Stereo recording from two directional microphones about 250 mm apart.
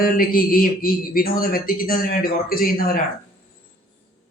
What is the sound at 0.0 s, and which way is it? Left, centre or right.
Speech, left.